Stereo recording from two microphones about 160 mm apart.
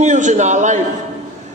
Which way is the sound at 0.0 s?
50° right (ahead or behind).